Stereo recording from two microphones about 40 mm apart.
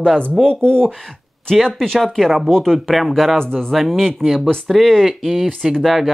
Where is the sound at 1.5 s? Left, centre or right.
Centre.